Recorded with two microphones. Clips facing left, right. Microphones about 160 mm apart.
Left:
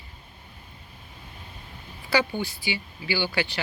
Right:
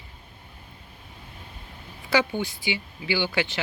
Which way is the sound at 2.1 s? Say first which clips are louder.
Right 1 dB; 20° right (ahead or behind).